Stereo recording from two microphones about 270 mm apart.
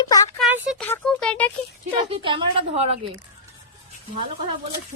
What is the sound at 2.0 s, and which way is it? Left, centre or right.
Speech, centre.